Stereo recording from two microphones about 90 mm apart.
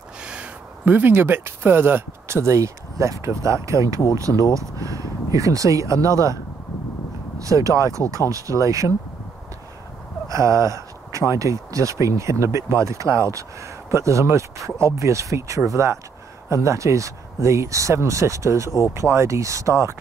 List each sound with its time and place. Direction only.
0.2 s speech: 10° right (ahead or behind); by 8.9 s 35° right (ahead or behind)
10.2 s speech: 35° right (ahead or behind)